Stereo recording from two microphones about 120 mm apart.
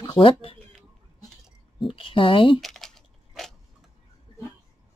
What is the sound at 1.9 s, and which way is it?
Speech, 50° left (ahead or behind).